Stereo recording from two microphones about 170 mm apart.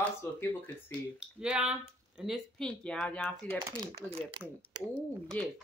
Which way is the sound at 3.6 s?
20° right (ahead or behind).